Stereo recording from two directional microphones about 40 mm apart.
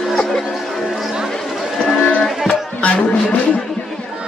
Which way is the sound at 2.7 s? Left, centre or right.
Left.